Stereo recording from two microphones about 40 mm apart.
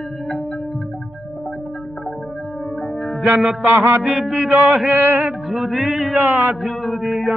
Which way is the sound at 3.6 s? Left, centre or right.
Right.